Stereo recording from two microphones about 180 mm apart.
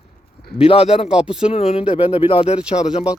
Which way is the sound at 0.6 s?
30° left (ahead or behind).